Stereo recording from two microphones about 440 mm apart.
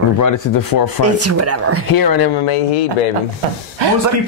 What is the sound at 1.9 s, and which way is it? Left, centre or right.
Speech, left.